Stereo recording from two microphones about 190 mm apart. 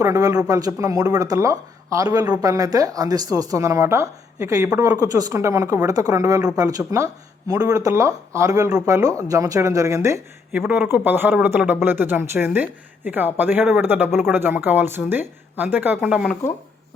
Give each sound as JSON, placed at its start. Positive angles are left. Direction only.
{"t": 0.0, "sound": "speech", "side_deg": -15}